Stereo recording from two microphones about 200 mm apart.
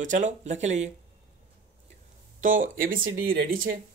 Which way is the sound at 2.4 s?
40° right (ahead or behind).